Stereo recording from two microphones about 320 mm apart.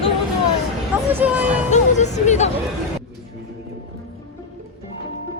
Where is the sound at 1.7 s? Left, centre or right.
Left.